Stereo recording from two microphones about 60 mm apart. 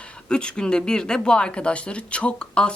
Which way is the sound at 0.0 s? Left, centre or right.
Centre.